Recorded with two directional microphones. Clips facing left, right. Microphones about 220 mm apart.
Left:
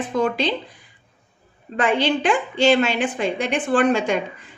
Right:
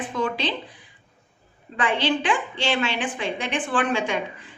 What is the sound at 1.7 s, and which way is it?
A woman's voice, 45° left (ahead or behind).